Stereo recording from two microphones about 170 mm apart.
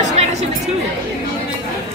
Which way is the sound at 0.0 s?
40° right (ahead or behind).